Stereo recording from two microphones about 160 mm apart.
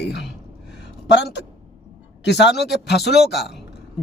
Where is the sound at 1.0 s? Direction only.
90° left.